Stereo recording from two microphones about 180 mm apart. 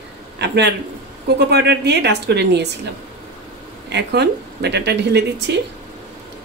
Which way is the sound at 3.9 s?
70° right (ahead or behind).